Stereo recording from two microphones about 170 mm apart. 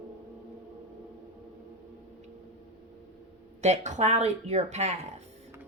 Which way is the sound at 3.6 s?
40° right (ahead or behind).